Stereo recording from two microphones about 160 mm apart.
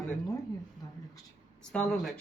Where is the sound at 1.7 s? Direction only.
5° left (ahead or behind).